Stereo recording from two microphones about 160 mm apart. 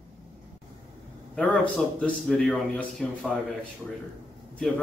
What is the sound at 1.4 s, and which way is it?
A man's voice, 5° left (ahead or behind).